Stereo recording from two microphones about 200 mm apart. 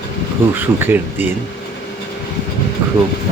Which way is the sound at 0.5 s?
10° right (ahead or behind).